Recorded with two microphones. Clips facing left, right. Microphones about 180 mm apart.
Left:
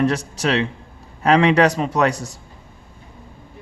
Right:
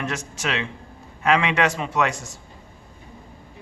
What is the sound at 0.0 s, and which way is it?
A man's voice, 35° left (ahead or behind).